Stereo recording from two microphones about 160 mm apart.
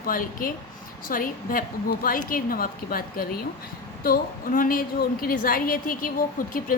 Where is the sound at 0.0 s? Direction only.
60° left (ahead or behind).